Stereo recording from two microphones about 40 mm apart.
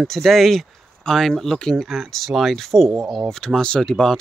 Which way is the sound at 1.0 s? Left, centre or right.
Centre.